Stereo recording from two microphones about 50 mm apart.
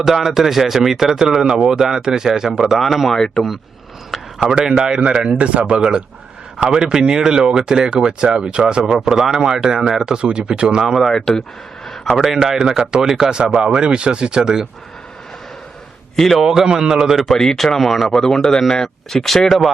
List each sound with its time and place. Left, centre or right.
0.0 s speech: centre
3.2 s speech: centre
4.1 s a sound: centre
4.8 s speech: centre
11.0 s speech: centre
11.9 s a sound: centre
12.5 s speech: centre
13.4 s speech: right
16.1 s speech: centre
16.4 s speech: centre
17.3 s speech: centre